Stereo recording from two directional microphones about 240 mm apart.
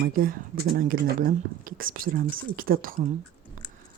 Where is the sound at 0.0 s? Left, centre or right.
Right.